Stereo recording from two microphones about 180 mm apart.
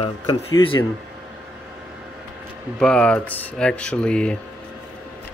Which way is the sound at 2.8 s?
5° left (ahead or behind).